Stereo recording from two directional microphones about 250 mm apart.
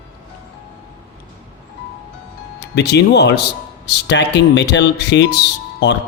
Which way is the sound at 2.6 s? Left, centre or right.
Left.